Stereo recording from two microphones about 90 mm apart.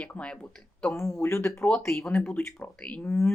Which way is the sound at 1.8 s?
25° left (ahead or behind).